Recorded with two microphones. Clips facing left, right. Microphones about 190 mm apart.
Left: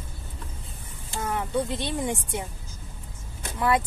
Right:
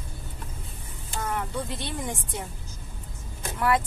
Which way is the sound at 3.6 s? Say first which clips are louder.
Left 1 dB; 20° left (ahead or behind).